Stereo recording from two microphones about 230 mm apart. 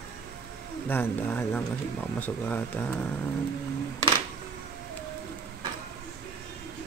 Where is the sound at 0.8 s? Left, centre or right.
Centre.